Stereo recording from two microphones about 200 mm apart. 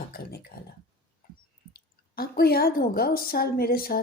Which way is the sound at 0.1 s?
50° left (ahead or behind).